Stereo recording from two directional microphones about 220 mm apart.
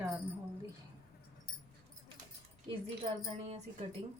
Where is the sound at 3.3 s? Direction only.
30° right (ahead or behind).